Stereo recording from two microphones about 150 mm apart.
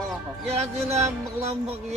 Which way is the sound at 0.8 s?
45° right (ahead or behind).